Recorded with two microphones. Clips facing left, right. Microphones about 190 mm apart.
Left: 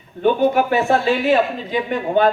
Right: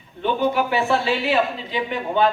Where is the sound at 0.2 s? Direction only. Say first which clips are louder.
Left 5 dB; 50° left (ahead or behind).